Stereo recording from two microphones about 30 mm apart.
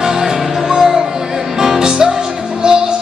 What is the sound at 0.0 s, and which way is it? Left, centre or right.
Music, centre.